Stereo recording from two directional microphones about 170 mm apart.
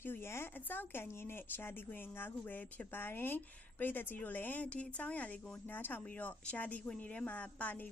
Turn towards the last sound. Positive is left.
turn(degrees=10)  # may be behind; listen again after turning